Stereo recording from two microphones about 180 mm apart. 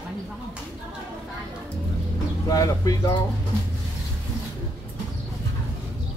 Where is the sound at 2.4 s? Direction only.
20° left (ahead or behind).